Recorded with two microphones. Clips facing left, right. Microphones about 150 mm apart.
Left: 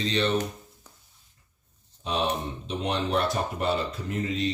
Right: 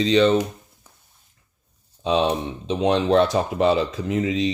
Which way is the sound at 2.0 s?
90° right.